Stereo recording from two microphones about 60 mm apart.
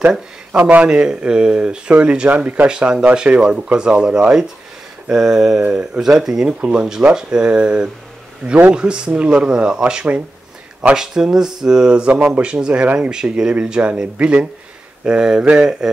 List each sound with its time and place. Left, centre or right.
0.5 s speech: right
2.7 s speech: centre